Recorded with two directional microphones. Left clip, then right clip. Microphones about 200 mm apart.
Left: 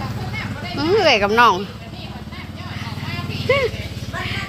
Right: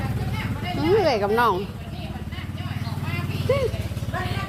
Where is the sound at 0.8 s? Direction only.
5° left (ahead or behind).